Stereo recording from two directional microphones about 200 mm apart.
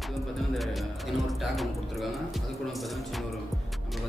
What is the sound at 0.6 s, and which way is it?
A man's voice, centre (ahead or behind).